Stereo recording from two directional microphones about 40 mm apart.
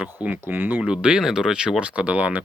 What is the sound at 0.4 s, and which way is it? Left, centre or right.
Speech, right.